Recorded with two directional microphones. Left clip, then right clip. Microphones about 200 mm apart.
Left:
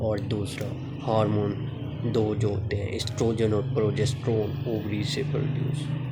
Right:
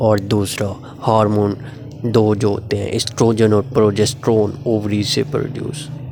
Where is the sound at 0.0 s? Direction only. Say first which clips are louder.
Right 13 dB; 45° right (ahead or behind).